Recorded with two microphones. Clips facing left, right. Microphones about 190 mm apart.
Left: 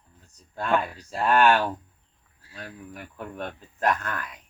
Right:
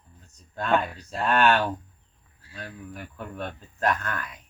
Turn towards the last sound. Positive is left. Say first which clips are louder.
# left 1 dB
turn(degrees=10)  # may be behind; listen again after turning